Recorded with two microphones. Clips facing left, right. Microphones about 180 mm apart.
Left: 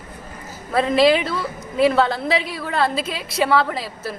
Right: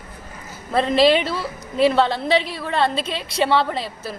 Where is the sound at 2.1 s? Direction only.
Centre (ahead or behind).